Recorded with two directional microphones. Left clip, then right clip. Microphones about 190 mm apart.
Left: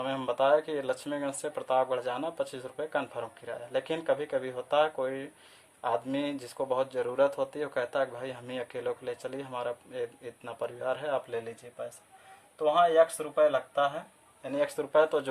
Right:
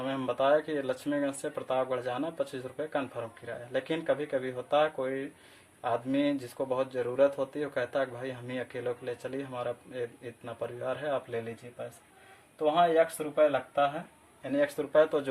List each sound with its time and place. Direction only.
0.0 s speech: 30° left (ahead or behind)
12.5 s speech: 25° left (ahead or behind)